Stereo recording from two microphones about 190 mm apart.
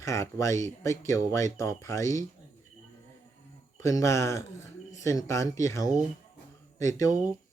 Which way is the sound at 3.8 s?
15° left (ahead or behind).